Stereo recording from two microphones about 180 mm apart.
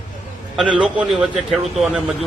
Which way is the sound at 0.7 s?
5° right (ahead or behind).